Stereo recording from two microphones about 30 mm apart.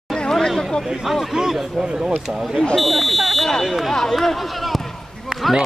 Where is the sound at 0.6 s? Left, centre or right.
Centre.